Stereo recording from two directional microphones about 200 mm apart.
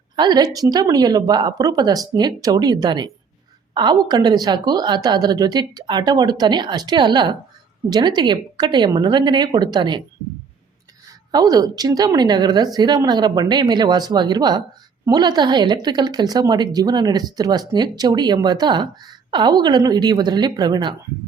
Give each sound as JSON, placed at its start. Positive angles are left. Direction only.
{"t": 0.2, "sound": "a woman's voice", "side_deg": -20}
{"t": 11.3, "sound": "a woman's voice", "side_deg": -20}